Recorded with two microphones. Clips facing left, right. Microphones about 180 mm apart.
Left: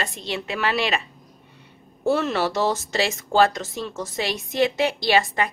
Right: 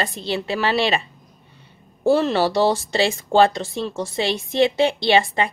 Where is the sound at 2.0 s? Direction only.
30° right (ahead or behind).